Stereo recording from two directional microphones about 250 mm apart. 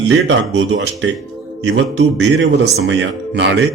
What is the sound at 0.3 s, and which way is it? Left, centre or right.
A man's voice, right.